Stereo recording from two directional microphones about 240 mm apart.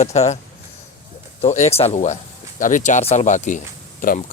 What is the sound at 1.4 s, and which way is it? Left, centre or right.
Speech, left.